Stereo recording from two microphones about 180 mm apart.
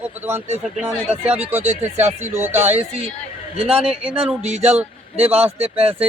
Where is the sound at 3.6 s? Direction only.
35° right (ahead or behind).